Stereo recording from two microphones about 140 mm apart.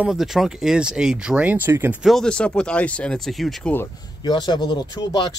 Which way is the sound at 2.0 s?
5° left (ahead or behind).